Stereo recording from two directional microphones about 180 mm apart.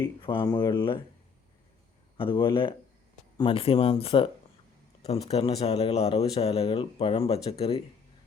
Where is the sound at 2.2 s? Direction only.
30° left (ahead or behind).